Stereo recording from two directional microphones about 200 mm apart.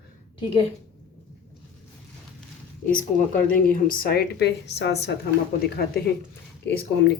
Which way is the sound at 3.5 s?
45° left (ahead or behind).